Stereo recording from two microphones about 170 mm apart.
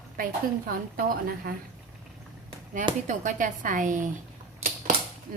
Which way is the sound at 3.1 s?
50° right (ahead or behind).